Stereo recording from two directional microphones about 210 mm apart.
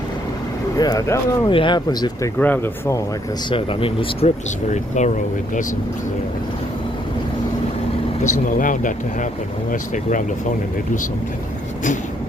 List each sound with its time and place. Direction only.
0.8 s speech: 15° left (ahead or behind)
3.5 s speech: 25° left (ahead or behind)
8.5 s speech: 40° left (ahead or behind)
9.9 s speech: 40° left (ahead or behind)